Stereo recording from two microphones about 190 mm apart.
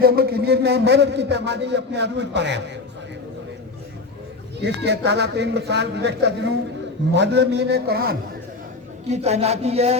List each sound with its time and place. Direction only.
0.0 s a man's voice: 55° right (ahead or behind)
4.6 s a man's voice: 65° right (ahead or behind)
9.0 s speech: 35° right (ahead or behind)